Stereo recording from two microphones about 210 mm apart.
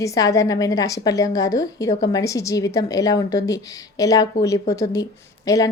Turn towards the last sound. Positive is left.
turn(degrees=15)  # may be behind; listen again after turning